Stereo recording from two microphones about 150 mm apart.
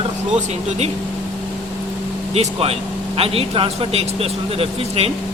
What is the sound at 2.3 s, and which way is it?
Speech, 45° right (ahead or behind).